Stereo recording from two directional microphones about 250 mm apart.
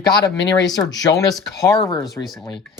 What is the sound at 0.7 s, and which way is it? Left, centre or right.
Speech, centre.